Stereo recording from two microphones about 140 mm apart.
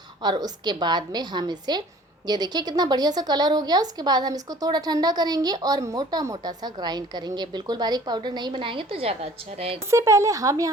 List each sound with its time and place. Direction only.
0.2 s a woman's voice: 30° right (ahead or behind); by 9.7 s 45° right (ahead or behind)
9.9 s speech: 20° right (ahead or behind)